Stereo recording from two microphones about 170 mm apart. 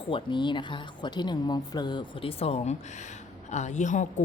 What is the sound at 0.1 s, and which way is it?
A woman's voice, 30° left (ahead or behind).